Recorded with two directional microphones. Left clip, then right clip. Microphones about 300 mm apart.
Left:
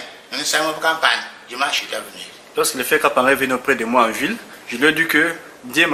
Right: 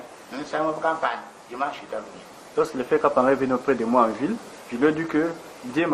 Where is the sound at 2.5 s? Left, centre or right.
Centre.